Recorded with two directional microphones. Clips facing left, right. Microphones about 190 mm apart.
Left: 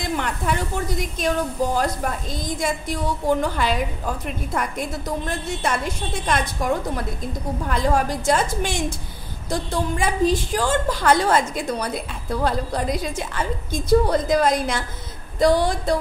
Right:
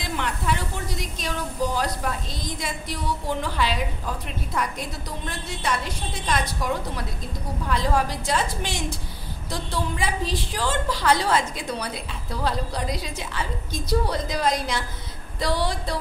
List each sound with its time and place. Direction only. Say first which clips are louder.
0.0 s a sound: left 3 dB; 50° left (ahead or behind)
2.4 s a woman's voice: left 8 dB; 50° left (ahead or behind)
5.6 s a woman's voice: even; 50° left (ahead or behind)